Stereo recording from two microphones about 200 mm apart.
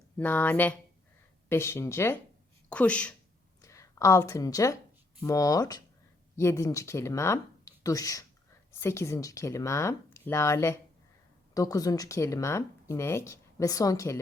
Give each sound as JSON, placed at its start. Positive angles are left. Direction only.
{"t": 0.2, "sound": "speech", "side_deg": 10}